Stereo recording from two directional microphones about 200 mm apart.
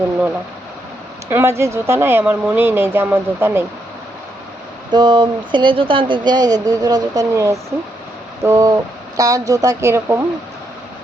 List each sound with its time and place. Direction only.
1.3 s a woman's voice: 15° right (ahead or behind)
4.9 s a woman's voice: 20° right (ahead or behind)